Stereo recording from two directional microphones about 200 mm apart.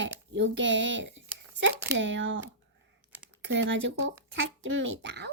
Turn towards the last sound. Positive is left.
turn(degrees=-60)  # may be behind; listen again after turning